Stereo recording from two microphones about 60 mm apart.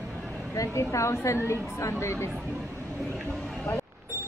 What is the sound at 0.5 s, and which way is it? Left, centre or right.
A woman's voice, left.